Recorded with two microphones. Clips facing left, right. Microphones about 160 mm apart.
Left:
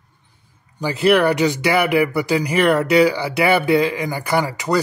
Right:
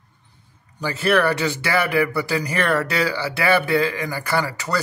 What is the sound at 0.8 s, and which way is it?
Speech, 15° left (ahead or behind).